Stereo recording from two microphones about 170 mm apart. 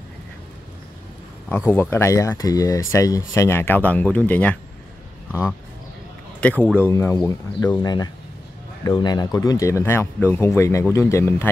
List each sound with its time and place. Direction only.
1.7 s speech: 15° left (ahead or behind)
6.4 s speech: 10° left (ahead or behind)